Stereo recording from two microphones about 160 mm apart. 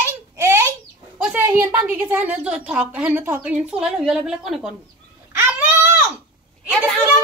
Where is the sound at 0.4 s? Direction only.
15° right (ahead or behind).